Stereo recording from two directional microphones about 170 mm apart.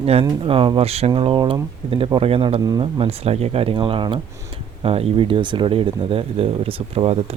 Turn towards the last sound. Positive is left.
turn(degrees=-35)  # may be behind; listen again after turning